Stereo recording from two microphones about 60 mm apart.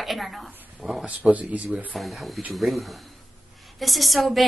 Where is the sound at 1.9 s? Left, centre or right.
Centre.